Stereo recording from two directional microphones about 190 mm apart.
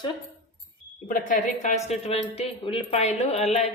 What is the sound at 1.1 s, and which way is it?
A woman's voice, 45° left (ahead or behind).